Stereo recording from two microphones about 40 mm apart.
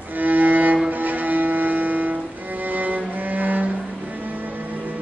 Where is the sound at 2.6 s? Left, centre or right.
Right.